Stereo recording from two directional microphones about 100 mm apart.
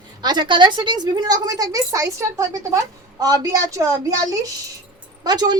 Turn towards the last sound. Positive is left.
turn(degrees=-40)  # may be behind; listen again after turning